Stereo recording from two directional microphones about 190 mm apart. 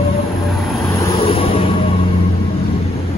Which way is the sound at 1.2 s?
30° left (ahead or behind).